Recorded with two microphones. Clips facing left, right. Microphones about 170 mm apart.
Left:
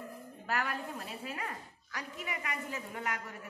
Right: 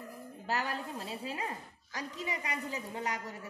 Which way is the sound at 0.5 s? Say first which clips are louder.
Even; 20° right (ahead or behind).